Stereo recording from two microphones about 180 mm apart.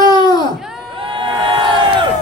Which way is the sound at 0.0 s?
25° left (ahead or behind).